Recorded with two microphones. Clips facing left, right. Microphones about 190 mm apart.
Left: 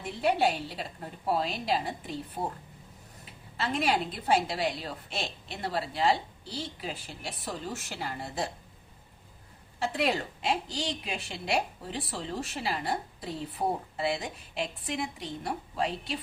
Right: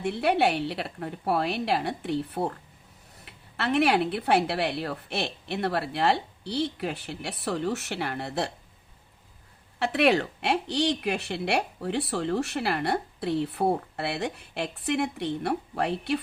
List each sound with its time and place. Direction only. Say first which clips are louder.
0.0 s a woman's voice: right 3 dB; 70° right (ahead or behind)
9.7 s a woman's voice: right 6 dB; 70° right (ahead or behind)